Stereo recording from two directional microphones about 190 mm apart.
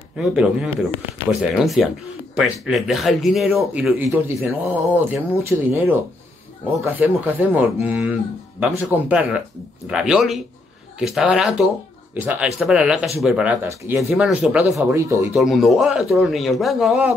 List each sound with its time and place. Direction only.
0.2 s speech: 5° right (ahead or behind)
14.8 s speech: 15° right (ahead or behind)
15.3 s speech: centre (ahead or behind)